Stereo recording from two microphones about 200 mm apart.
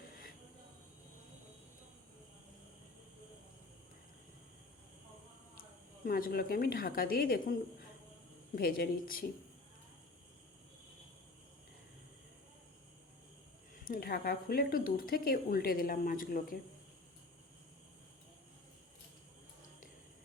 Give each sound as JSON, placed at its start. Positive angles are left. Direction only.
{"t": 6.1, "sound": "speech", "side_deg": 45}
{"t": 8.5, "sound": "speech", "side_deg": 50}
{"t": 13.7, "sound": "speech", "side_deg": 45}